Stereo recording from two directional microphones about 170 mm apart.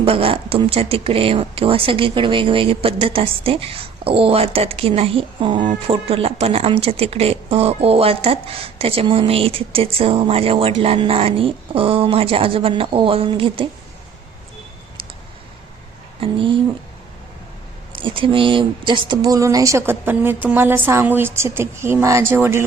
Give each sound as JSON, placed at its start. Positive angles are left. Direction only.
{"t": 0.0, "sound": "speech", "side_deg": -35}
{"t": 17.9, "sound": "speech", "side_deg": -30}